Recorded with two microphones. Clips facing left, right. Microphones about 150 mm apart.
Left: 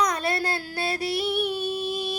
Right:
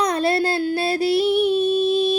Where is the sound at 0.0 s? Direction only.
30° right (ahead or behind).